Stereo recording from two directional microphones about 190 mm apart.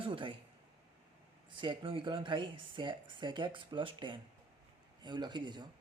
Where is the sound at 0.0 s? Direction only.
25° right (ahead or behind).